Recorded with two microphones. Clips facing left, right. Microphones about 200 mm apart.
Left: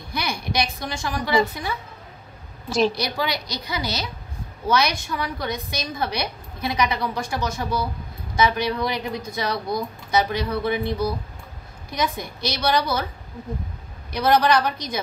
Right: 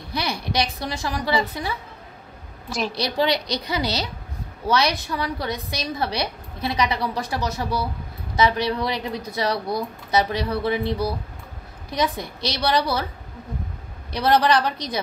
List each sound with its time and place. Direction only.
0.1 s a woman's voice: 30° right (ahead or behind)
3.6 s a woman's voice: 30° right (ahead or behind)
14.1 s a woman's voice: 30° right (ahead or behind)